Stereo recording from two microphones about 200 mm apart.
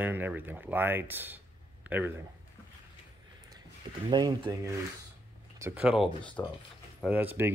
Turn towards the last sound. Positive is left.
turn(degrees=-10)  # may be behind; listen again after turning